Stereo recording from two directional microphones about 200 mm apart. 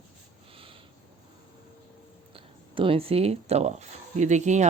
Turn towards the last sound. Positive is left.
turn(degrees=-35)  # may be behind; listen again after turning